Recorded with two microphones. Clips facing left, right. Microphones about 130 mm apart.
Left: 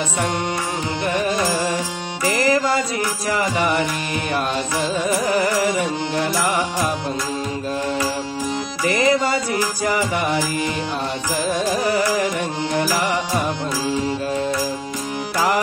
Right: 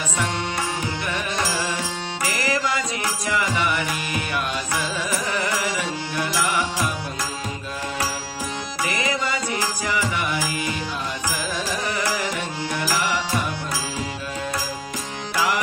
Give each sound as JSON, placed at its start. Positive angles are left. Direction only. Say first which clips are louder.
{"t": 1.0, "sound": "music", "louder": "left 9 dB", "side_deg": 40}
{"t": 2.2, "sound": "music", "louder": "left 7 dB", "side_deg": 35}
{"t": 5.0, "sound": "music", "louder": "left 7 dB", "side_deg": 40}
{"t": 8.8, "sound": "music", "louder": "left 8 dB", "side_deg": 40}
{"t": 11.5, "sound": "music", "louder": "left 10 dB", "side_deg": 45}
{"t": 15.3, "sound": "music", "louder": "left 4 dB", "side_deg": 40}